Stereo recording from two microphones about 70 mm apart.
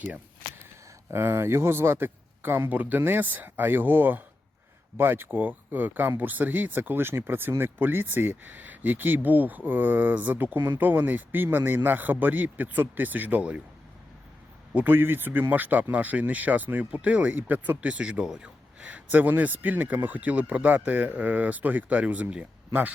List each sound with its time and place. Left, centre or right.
1.1 s speech: right; by 13.6 s centre
14.8 s speech: right
17.8 s speech: centre
18.9 s speech: right